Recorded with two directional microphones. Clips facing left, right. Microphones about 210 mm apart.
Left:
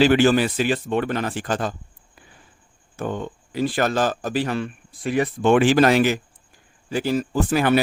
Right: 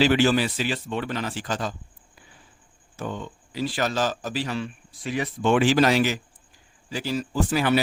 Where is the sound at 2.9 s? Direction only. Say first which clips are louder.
Left 5 dB; 55° left (ahead or behind).